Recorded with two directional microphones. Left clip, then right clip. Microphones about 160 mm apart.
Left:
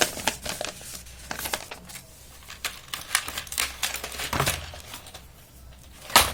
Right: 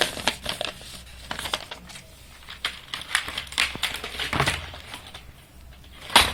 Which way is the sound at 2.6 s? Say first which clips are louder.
Right 3 dB; 25° left (ahead or behind).